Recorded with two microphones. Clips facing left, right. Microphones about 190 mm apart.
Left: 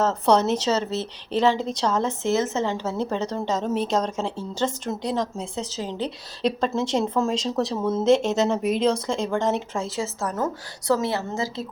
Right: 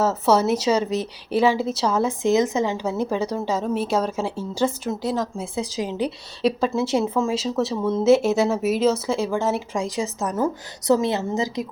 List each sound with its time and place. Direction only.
0.0 s a woman's voice: 5° right (ahead or behind)